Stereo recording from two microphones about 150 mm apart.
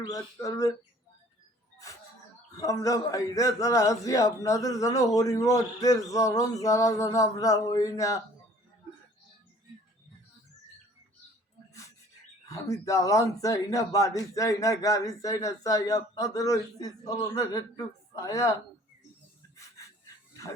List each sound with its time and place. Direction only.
0.1 s speech: 20° left (ahead or behind)
2.6 s speech: 20° left (ahead or behind)
12.5 s speech: 20° left (ahead or behind)
19.5 s a sound: 20° left (ahead or behind)